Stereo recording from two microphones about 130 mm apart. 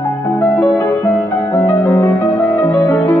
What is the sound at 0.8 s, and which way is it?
Music, 25° left (ahead or behind).